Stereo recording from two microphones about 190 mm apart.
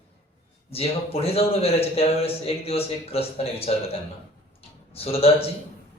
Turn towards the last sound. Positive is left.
turn(degrees=30)  # may be behind; listen again after turning